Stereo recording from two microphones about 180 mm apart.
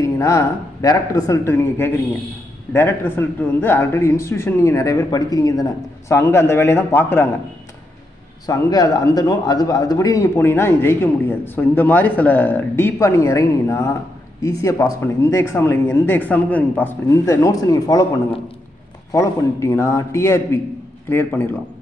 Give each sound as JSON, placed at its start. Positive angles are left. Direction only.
{"t": 0.0, "sound": "speech", "side_deg": 15}
{"t": 8.5, "sound": "speech", "side_deg": 20}
{"t": 19.1, "sound": "speech", "side_deg": 15}